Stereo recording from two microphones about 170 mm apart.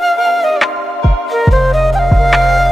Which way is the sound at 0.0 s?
Centre (ahead or behind).